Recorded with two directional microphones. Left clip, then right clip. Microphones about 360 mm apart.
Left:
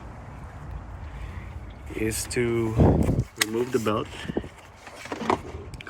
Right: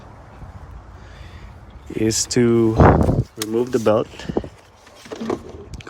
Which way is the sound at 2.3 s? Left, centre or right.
Right.